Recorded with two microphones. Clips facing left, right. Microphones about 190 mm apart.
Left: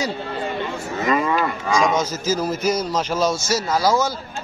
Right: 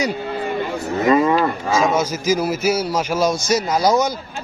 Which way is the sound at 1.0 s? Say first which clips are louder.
Right 5 dB; 30° right (ahead or behind).